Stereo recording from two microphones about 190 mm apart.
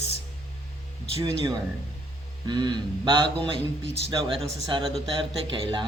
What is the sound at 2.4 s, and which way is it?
Speech, 25° right (ahead or behind).